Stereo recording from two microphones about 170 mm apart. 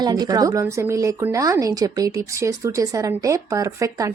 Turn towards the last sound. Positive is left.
turn(degrees=-20)  # may be behind; listen again after turning